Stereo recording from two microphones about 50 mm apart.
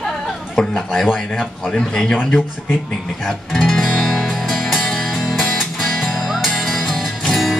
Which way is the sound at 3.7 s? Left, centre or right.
Centre.